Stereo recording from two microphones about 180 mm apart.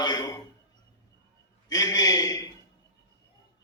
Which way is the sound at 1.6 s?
20° left (ahead or behind).